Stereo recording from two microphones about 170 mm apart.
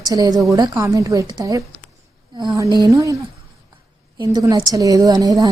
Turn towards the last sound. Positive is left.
turn(degrees=-20)  # may be behind; listen again after turning